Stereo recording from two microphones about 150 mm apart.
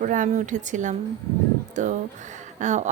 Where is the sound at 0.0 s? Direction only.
60° right (ahead or behind).